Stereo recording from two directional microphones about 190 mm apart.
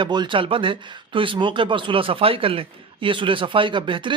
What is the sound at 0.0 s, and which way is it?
Speech, 25° right (ahead or behind).